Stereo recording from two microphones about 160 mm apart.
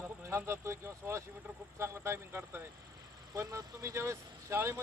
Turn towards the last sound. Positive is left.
turn(degrees=-15)  # may be behind; listen again after turning